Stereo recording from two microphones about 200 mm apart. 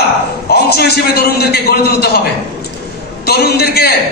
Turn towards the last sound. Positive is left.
turn(degrees=50)  # may be behind; listen again after turning